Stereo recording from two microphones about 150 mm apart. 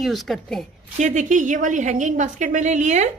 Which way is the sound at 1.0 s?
55° right (ahead or behind).